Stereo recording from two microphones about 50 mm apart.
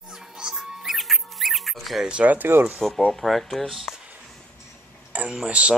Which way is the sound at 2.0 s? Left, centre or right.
Right.